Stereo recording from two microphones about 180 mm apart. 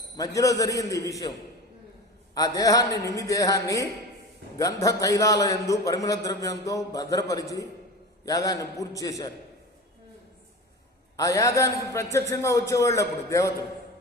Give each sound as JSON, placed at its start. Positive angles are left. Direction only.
{"t": 0.2, "sound": "a man's voice", "side_deg": 20}
{"t": 2.3, "sound": "a man's voice", "side_deg": 20}
{"t": 11.2, "sound": "a man's voice", "side_deg": 20}